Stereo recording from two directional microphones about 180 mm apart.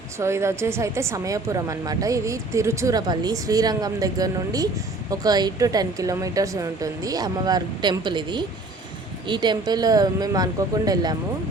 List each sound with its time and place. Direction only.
0.2 s a woman's voice: 15° right (ahead or behind)